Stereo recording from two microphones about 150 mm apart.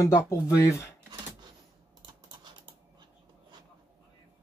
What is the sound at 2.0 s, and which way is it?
Typing, 30° right (ahead or behind).